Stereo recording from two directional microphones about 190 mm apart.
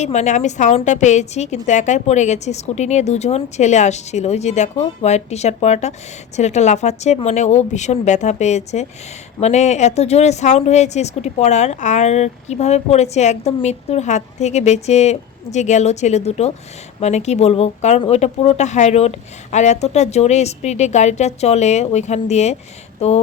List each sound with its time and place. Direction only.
0.0 s a woman's voice: 40° left (ahead or behind)